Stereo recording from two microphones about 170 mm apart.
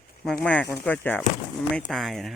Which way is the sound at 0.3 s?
5° left (ahead or behind).